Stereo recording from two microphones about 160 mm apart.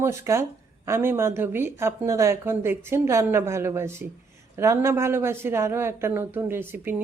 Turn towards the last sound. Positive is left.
turn(degrees=-15)  # may be behind; listen again after turning